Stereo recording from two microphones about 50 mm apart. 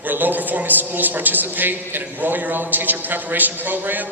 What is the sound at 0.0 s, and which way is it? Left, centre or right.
A woman's voice, right.